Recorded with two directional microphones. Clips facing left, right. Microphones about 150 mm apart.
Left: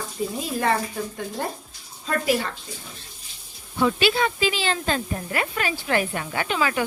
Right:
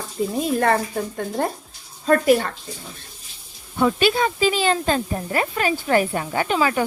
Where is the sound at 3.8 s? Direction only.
45° right (ahead or behind).